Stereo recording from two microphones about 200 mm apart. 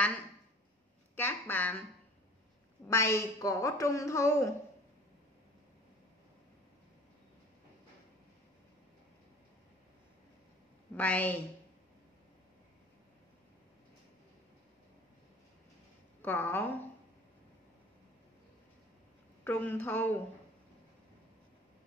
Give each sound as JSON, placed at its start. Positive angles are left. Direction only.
{"t": 1.1, "sound": "a woman's voice", "side_deg": 10}
{"t": 2.9, "sound": "a woman's voice", "side_deg": 15}
{"t": 11.0, "sound": "a woman's voice", "side_deg": 5}
{"t": 16.2, "sound": "a woman's voice", "side_deg": 10}
{"t": 19.4, "sound": "a woman's voice", "side_deg": 10}